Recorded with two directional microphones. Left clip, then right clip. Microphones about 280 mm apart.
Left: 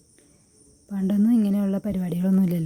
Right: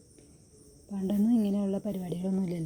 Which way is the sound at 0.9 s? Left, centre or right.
Centre.